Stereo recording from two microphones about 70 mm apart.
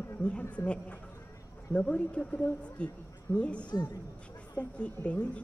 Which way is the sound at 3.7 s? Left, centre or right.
Left.